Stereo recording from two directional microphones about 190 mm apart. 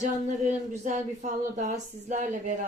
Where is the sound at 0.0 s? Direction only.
40° right (ahead or behind).